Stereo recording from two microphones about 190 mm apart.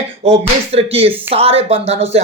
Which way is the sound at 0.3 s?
30° right (ahead or behind).